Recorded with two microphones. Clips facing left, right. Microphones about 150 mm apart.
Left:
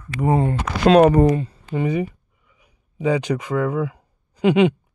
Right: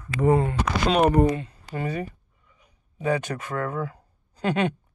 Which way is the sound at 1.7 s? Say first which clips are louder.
Left 7 dB; 15° left (ahead or behind).